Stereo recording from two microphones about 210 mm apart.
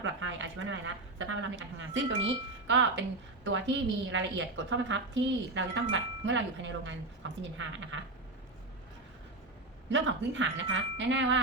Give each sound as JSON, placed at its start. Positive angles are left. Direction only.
{"t": 0.0, "sound": "a sound", "side_deg": -65}
{"t": 1.2, "sound": "a woman's voice", "side_deg": -60}
{"t": 9.9, "sound": "a woman's voice", "side_deg": -60}